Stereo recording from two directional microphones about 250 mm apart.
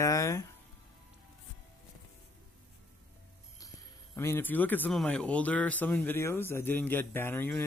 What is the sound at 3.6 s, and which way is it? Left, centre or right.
Speech, centre.